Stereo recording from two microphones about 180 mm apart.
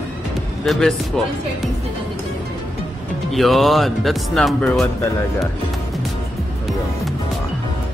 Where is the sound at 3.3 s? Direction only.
Centre (ahead or behind).